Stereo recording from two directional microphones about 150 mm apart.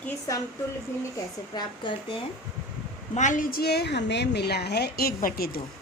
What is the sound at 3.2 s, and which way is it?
A woman's voice, 60° left (ahead or behind).